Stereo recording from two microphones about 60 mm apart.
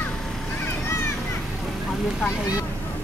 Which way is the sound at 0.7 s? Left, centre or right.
Left.